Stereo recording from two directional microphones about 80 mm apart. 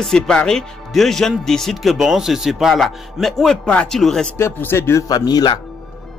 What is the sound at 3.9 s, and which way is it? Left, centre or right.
Speech, centre.